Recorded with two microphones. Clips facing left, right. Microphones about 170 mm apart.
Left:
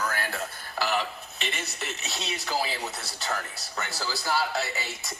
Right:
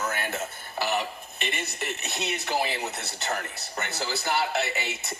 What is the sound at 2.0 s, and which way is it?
A man's voice, 20° right (ahead or behind).